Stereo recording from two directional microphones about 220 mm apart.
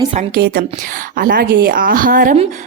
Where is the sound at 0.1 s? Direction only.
35° right (ahead or behind).